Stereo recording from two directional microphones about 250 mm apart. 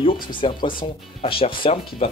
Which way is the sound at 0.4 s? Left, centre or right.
Centre.